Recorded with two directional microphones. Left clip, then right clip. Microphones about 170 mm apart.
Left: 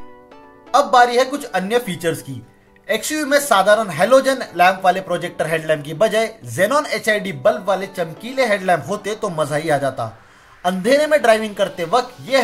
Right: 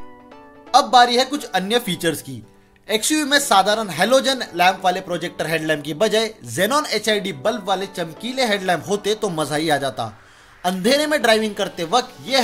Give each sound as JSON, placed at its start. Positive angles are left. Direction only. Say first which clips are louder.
{"t": 0.7, "sound": "speech", "louder": "even", "side_deg": -50}